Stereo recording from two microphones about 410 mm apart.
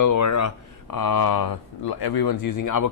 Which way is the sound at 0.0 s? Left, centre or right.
Left.